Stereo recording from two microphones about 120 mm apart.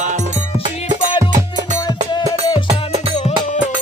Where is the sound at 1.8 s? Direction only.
40° left (ahead or behind).